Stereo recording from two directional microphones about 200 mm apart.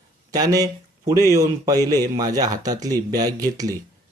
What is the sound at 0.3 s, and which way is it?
Speech, 20° right (ahead or behind).